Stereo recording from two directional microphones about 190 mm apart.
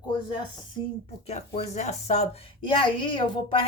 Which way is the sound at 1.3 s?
35° left (ahead or behind).